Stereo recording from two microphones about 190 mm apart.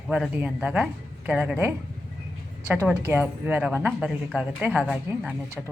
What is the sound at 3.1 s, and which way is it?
A woman's voice, 10° right (ahead or behind).